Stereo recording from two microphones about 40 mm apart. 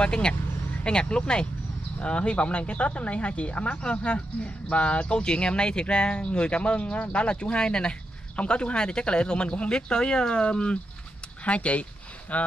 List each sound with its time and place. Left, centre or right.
0.0 s speech: left